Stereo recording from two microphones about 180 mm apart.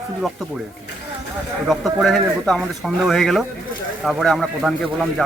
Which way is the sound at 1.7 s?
Centre (ahead or behind).